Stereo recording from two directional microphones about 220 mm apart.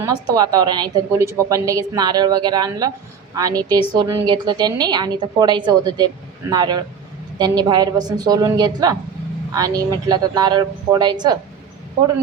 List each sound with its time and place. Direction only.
0.0 s a woman's voice: 20° right (ahead or behind)